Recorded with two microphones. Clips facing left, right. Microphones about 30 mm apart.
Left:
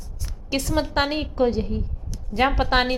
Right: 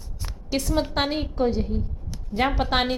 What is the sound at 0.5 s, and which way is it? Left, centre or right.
A woman's voice, centre.